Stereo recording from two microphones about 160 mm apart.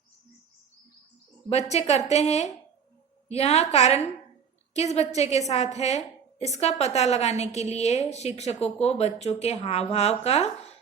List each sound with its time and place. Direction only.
1.7 s a woman's voice: 45° left (ahead or behind)